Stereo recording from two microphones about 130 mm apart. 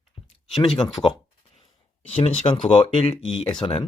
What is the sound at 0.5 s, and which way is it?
Speech, centre (ahead or behind).